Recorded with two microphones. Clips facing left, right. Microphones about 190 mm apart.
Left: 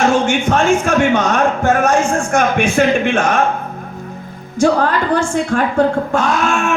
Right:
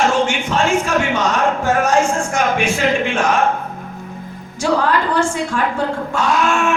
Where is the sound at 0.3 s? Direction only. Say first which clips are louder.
Left 4 dB; 50° left (ahead or behind).